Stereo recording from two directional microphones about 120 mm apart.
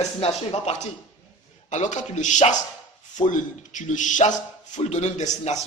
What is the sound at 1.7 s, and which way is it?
Speech, 85° left.